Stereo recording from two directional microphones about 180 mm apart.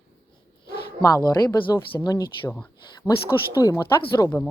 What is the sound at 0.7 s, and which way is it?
Bow-wow, 65° left (ahead or behind).